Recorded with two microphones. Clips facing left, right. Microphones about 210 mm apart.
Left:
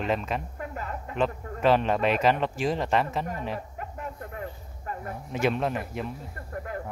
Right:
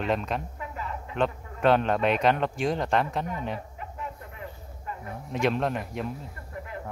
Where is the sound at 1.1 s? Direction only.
Centre (ahead or behind).